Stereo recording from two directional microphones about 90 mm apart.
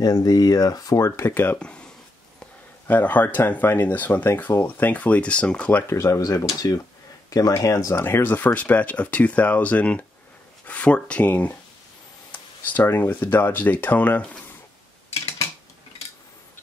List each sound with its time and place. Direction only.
0.0 s speech: 45° left (ahead or behind)
1.3 s speech: 20° left (ahead or behind)
1.6 s speech: 10° left (ahead or behind)
2.9 s speech: 20° left (ahead or behind)
5.9 s speech: 35° left (ahead or behind); by 14.4 s 15° left (ahead or behind)